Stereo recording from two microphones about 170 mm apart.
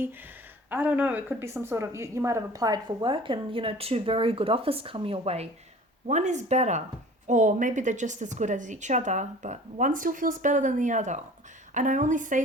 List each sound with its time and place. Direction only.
0.7 s a woman's voice: 10° right (ahead or behind); by 12.4 s 50° right (ahead or behind)